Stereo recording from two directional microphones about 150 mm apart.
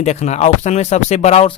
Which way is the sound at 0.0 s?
50° left (ahead or behind).